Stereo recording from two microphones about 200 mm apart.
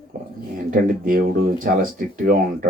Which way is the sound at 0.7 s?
45° right (ahead or behind).